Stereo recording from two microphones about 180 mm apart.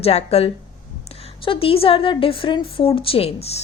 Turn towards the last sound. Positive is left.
turn(degrees=35)  # may be behind; listen again after turning